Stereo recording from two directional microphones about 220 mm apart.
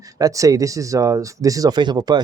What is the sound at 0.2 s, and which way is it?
Speech, 15° right (ahead or behind).